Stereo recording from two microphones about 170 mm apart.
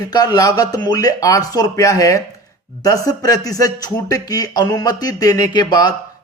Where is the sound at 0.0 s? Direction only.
25° left (ahead or behind).